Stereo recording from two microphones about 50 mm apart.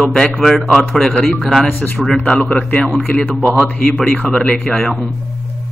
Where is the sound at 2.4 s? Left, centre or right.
Left.